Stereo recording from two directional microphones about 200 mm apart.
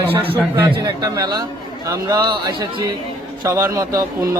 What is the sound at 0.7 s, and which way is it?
A man's voice, 20° right (ahead or behind).